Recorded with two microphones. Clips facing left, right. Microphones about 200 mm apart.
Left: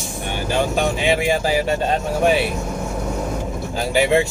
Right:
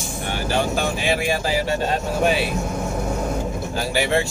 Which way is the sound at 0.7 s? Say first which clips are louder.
Left 3 dB; 20° left (ahead or behind).